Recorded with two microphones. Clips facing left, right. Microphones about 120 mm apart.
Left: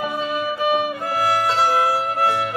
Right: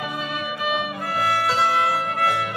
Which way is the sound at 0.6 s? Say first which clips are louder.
Left 5 dB; 30° left (ahead or behind).